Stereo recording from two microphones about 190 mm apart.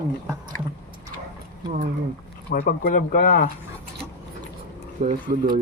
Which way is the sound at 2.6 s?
50° left (ahead or behind).